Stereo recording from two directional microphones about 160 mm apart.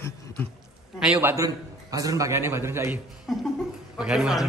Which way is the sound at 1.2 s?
15° right (ahead or behind).